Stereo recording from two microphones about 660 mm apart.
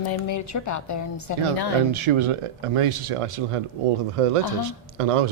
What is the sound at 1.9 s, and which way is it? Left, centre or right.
Speech, right.